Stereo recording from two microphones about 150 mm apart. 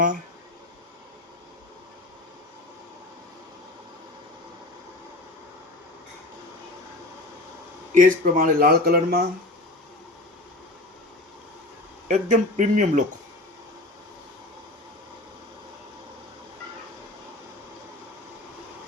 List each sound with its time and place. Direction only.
7.9 s speech: 65° right (ahead or behind); by 9.2 s 90° right
12.0 s speech: 50° right (ahead or behind)